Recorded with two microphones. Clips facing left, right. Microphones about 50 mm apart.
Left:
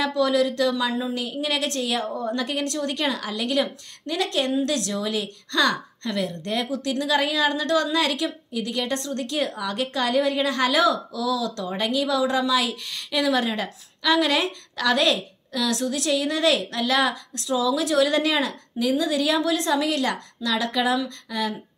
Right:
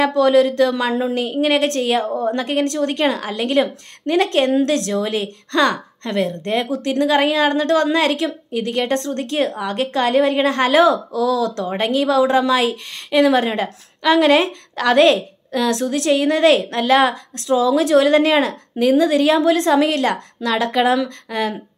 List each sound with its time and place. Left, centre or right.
0.0 s a woman's voice: right
20.9 s speech: right